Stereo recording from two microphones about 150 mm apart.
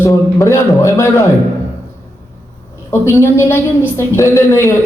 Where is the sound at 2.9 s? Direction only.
15° left (ahead or behind).